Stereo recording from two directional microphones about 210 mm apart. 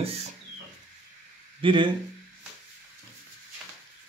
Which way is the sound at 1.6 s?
25° right (ahead or behind).